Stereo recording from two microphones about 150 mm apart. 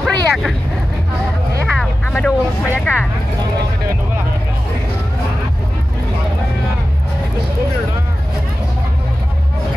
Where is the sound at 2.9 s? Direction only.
15° left (ahead or behind).